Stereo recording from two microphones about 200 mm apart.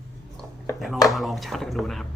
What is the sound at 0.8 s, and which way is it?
Speech, centre (ahead or behind).